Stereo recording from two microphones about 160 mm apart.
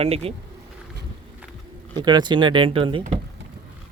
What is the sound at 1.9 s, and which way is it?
Speech, 25° right (ahead or behind).